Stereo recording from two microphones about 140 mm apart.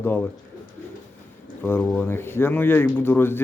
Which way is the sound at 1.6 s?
15° left (ahead or behind).